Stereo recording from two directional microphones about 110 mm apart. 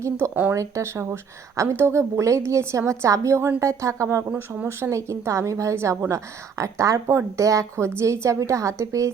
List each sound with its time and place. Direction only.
0.5 s a woman's voice: 25° right (ahead or behind)
4.4 s speech: 10° right (ahead or behind)
4.8 s a woman's voice: 25° right (ahead or behind)